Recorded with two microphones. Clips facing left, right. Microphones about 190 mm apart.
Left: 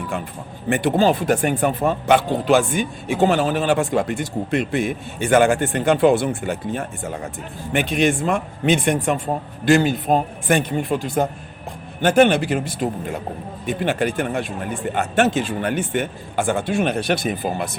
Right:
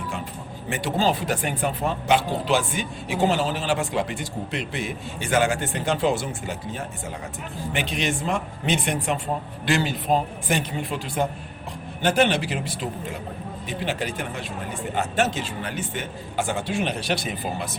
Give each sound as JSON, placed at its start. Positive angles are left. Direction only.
{"t": 0.7, "sound": "speech", "side_deg": 55}